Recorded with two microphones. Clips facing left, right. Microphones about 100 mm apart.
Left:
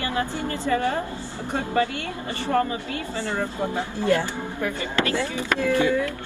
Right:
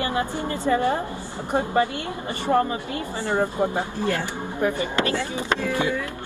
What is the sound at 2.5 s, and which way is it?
Speech, 30° right (ahead or behind).